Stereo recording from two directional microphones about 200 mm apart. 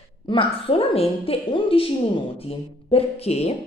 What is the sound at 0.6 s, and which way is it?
A woman's voice, 30° left (ahead or behind).